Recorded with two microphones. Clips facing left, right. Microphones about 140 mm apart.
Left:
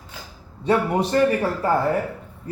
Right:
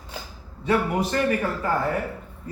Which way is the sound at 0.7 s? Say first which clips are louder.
Left 3 dB; 30° left (ahead or behind).